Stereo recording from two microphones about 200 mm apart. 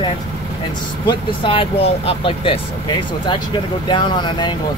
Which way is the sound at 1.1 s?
25° left (ahead or behind).